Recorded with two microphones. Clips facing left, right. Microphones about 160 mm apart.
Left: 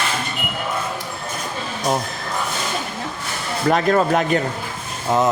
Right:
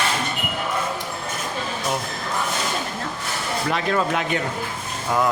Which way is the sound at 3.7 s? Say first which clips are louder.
Left 7 dB; 45° left (ahead or behind).